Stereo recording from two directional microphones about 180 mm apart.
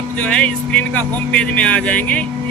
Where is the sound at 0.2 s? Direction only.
5° left (ahead or behind).